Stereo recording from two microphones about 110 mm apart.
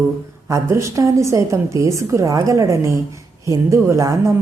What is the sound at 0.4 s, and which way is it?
A woman's voice, 30° right (ahead or behind).